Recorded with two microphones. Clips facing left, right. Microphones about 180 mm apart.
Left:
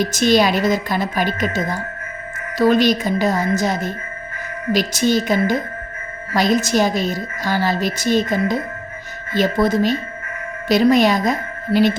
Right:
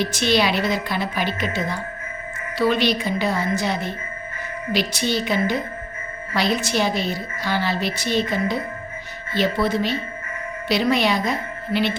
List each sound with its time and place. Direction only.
0.0 s a woman's voice: 45° left (ahead or behind)